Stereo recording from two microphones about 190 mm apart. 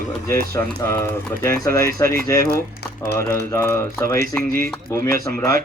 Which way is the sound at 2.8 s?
60° left (ahead or behind).